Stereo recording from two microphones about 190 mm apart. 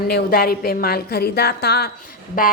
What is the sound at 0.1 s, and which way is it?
A woman's voice, 55° left (ahead or behind).